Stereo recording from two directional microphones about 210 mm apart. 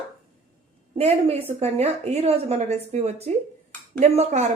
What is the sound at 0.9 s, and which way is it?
Speech, 30° right (ahead or behind).